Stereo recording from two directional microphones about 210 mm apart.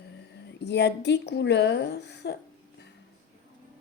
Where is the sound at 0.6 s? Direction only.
55° left (ahead or behind).